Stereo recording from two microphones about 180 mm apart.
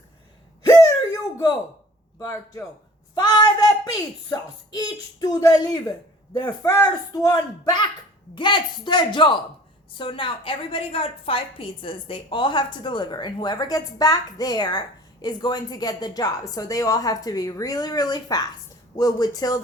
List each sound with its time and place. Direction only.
2.1 s a man's voice: 20° left (ahead or behind)